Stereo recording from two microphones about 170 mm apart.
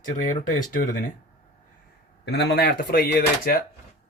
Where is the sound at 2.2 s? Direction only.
80° left.